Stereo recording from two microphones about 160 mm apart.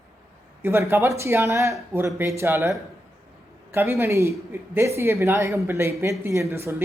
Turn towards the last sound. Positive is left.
turn(degrees=-15)  # may be behind; listen again after turning